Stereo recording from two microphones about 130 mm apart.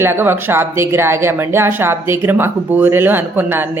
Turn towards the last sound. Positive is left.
turn(degrees=-15)  # may be behind; listen again after turning